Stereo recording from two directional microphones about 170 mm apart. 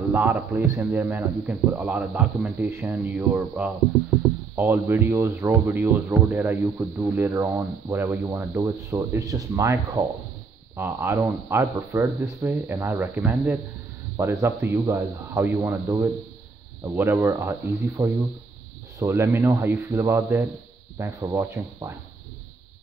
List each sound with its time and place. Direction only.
0.1 s speech: 10° right (ahead or behind)